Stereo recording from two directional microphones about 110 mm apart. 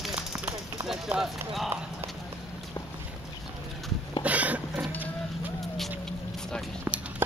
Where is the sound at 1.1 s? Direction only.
5° right (ahead or behind).